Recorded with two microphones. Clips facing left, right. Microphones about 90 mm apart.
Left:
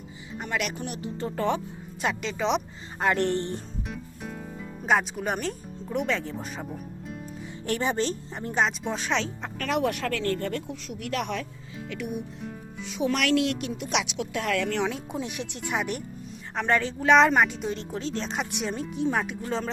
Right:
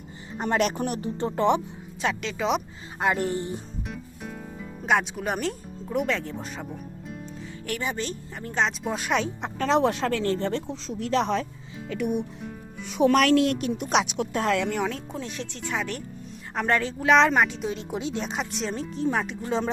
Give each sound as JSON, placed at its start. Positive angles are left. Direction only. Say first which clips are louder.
{"t": 1.4, "sound": "speech", "louder": "right 5 dB", "side_deg": -20}
{"t": 2.0, "sound": "a woman's voice", "louder": "right 1 dB", "side_deg": 5}
{"t": 3.0, "sound": "music", "louder": "left 1 dB", "side_deg": -5}
{"t": 7.7, "sound": "speech", "louder": "left 4 dB", "side_deg": 35}
{"t": 8.4, "sound": "speech", "louder": "even", "side_deg": 20}
{"t": 8.6, "sound": "a woman's voice", "louder": "right 4 dB", "side_deg": 0}
{"t": 9.6, "sound": "speech", "louder": "right 4 dB", "side_deg": -25}
{"t": 11.9, "sound": "speech", "louder": "right 6 dB", "side_deg": -50}
{"t": 13.2, "sound": "speech", "louder": "right 3 dB", "side_deg": -40}
{"t": 14.4, "sound": "speech", "louder": "right 2 dB", "side_deg": -20}
{"t": 14.8, "sound": "speech", "louder": "left 1 dB", "side_deg": 15}
{"t": 16.6, "sound": "a woman's voice", "louder": "even", "side_deg": 0}